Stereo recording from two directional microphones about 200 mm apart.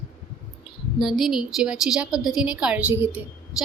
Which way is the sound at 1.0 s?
Centre (ahead or behind).